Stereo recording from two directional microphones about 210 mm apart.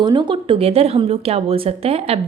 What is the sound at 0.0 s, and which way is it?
A woman's voice, 20° right (ahead or behind).